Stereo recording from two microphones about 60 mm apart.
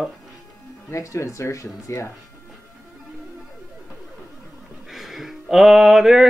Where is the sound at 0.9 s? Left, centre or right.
Left.